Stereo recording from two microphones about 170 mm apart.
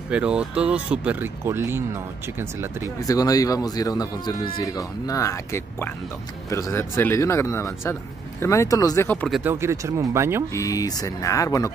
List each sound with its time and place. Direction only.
0.1 s speech: 5° right (ahead or behind)
3.0 s speech: 20° left (ahead or behind)
9.3 s speech: 10° right (ahead or behind)
10.5 s speech: 20° left (ahead or behind)